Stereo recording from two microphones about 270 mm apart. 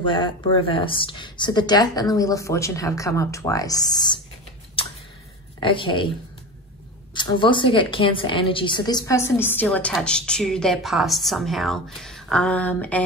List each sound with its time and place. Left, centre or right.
0.0 s speech: centre
5.6 s speech: centre
7.2 s a woman's voice: centre